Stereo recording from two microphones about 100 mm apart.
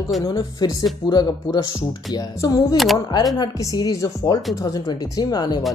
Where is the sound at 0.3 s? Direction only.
45° left (ahead or behind).